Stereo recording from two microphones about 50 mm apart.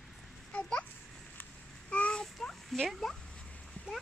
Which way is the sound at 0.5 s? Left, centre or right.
Left.